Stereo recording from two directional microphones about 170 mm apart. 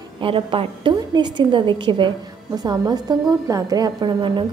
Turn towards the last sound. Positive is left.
turn(degrees=-30)  # may be behind; listen again after turning